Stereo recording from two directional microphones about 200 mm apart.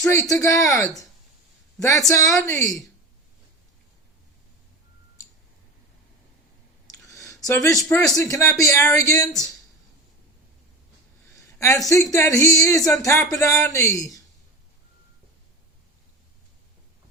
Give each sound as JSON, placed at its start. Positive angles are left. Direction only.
{"t": 0.1, "sound": "speech", "side_deg": 15}
{"t": 6.8, "sound": "clicking", "side_deg": 15}
{"t": 8.1, "sound": "speech", "side_deg": 15}
{"t": 11.3, "sound": "a sound", "side_deg": 15}
{"t": 12.1, "sound": "speech", "side_deg": 15}